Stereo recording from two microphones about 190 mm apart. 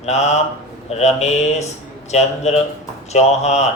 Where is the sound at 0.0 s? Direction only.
35° left (ahead or behind).